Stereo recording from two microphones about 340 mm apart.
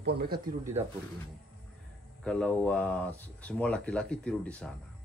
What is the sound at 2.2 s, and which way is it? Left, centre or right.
Speech, centre.